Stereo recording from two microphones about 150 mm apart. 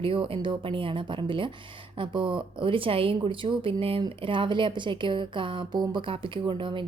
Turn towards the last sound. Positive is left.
turn(degrees=-35)  # may be behind; listen again after turning